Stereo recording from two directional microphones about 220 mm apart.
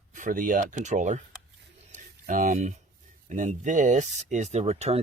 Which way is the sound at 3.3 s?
35° right (ahead or behind).